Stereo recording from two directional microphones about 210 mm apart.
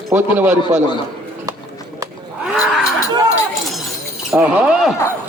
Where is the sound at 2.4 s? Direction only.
Centre (ahead or behind).